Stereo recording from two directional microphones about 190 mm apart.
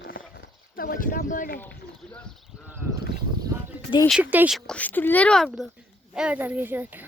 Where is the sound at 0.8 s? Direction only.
45° left (ahead or behind).